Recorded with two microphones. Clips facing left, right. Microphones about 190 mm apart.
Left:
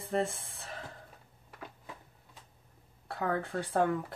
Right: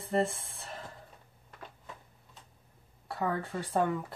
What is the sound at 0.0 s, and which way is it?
Music, centre (ahead or behind).